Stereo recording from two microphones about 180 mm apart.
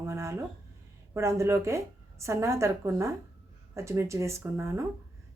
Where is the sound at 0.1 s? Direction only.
15° right (ahead or behind).